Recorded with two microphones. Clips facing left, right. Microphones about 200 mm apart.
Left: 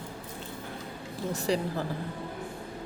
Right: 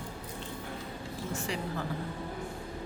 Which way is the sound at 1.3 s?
35° left (ahead or behind).